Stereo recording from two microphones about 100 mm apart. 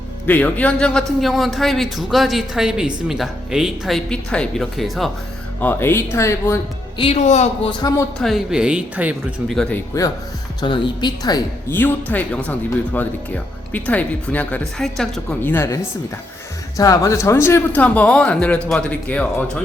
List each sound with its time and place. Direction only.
0.3 s speech: 15° left (ahead or behind)
1.2 s a woman's voice: centre (ahead or behind)
5.5 s speech: 20° left (ahead or behind)
7.8 s speech: 40° left (ahead or behind)
8.2 s a woman's voice: centre (ahead or behind)
9.5 s a woman's voice: 5° left (ahead or behind)
9.9 s speech: 30° left (ahead or behind)
10.6 s speech: 50° left (ahead or behind)
11.7 s speech: 20° left (ahead or behind)
14.8 s a woman's voice: 5° left (ahead or behind)
15.4 s speech: 20° left (ahead or behind)
16.7 s speech: 35° left (ahead or behind)
17.7 s speech: 15° left (ahead or behind)